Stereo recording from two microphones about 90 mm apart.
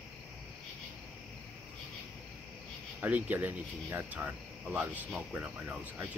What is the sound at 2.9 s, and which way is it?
Speech, 15° right (ahead or behind).